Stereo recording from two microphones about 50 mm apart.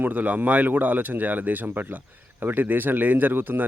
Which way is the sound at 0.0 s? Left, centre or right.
Right.